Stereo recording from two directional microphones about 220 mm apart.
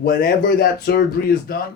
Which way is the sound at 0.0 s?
45° left (ahead or behind).